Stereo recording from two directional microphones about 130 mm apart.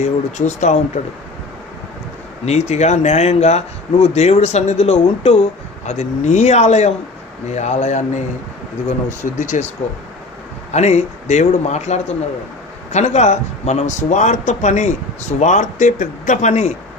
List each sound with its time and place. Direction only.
0.0 s a man's voice: 65° left (ahead or behind)
2.4 s a man's voice: 55° left (ahead or behind)
10.7 s a man's voice: 60° left (ahead or behind)